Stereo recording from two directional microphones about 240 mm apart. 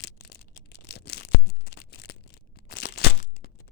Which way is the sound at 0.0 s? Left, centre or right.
Left.